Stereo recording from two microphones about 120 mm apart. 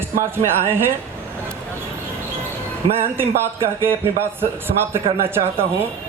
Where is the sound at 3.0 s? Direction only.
20° right (ahead or behind).